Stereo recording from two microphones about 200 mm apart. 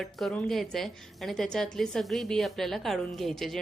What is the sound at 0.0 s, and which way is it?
A woman's voice, centre (ahead or behind).